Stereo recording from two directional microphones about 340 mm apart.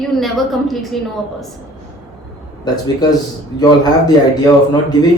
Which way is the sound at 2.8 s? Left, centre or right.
Centre.